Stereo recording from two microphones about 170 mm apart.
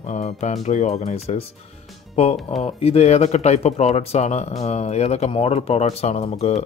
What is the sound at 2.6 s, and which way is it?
Speech, 35° left (ahead or behind).